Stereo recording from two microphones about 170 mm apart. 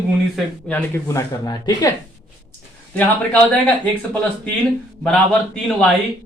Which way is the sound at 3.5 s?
10° left (ahead or behind).